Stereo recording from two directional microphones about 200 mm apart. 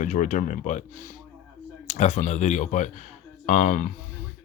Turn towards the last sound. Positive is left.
turn(degrees=45)  # may be behind; listen again after turning